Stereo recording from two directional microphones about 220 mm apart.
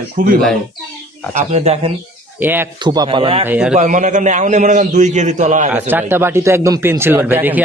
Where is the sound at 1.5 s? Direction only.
30° right (ahead or behind).